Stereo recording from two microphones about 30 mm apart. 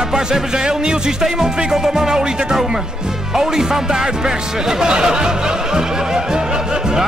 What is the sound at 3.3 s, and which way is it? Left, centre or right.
Speech, centre.